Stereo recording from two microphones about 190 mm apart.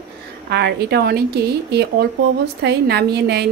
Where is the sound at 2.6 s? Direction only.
60° right (ahead or behind).